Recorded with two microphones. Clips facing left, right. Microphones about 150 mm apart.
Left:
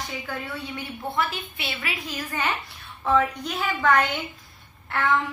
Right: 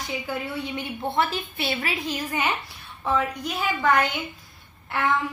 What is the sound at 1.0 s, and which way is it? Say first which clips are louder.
A woman's voice: right 3 dB; 35° right (ahead or behind).